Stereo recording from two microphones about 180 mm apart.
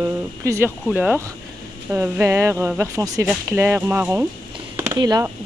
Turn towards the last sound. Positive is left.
turn(degrees=-20)  # may be behind; listen again after turning